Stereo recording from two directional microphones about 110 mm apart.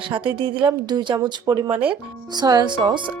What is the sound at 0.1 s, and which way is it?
Speech, 50° right (ahead or behind).